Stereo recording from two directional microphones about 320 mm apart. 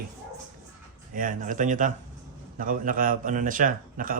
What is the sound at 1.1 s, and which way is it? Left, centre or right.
Speech, right.